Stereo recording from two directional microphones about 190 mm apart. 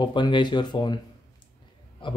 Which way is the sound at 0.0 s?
25° left (ahead or behind).